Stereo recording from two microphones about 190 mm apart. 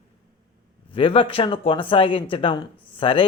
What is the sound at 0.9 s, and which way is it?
Speech, 25° left (ahead or behind).